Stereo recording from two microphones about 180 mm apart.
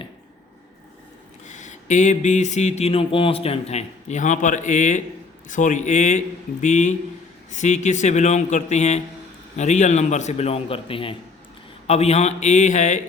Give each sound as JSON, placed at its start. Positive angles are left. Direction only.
{"t": 1.5, "sound": "speech", "side_deg": 40}